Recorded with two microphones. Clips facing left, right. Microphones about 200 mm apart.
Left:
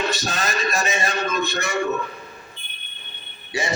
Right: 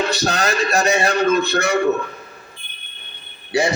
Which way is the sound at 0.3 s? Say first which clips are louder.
Right 5 dB; 75° right (ahead or behind).